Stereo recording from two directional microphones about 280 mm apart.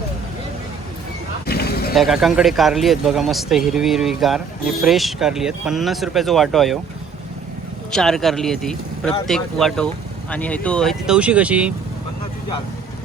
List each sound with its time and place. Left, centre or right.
1.5 s a sound: left
2.0 s speech: centre
7.9 s speech: centre